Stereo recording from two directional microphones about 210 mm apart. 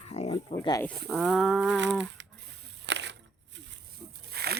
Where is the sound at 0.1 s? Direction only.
30° left (ahead or behind).